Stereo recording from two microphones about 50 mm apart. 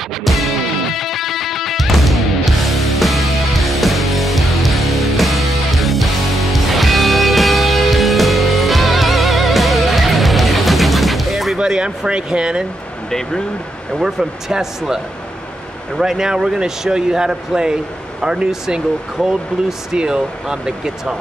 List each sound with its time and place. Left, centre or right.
0.2 s music: centre
11.5 s speech: centre
13.9 s speech: centre
16.0 s speech: centre
19.9 s speech: centre